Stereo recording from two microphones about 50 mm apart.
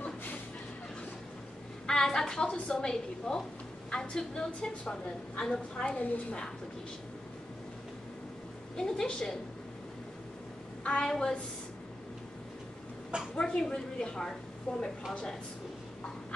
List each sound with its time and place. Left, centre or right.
1.9 s a woman's voice: centre
5.9 s a woman's voice: left
8.7 s a woman's voice: centre
10.8 s a woman's voice: centre
13.4 s a woman's voice: centre
14.7 s a woman's voice: left